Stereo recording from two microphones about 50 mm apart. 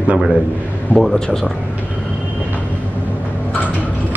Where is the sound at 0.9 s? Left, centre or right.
Centre.